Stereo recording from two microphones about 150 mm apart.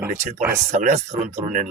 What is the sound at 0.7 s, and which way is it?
Speech, 50° right (ahead or behind).